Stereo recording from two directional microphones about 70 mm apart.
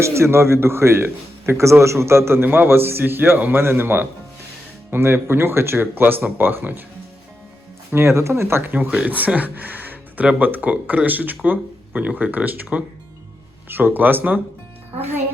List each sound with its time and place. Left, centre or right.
0.0 s a man's voice: right
7.9 s speech: right